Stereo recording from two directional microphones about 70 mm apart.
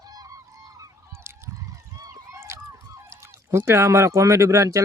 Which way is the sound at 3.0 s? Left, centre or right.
Right.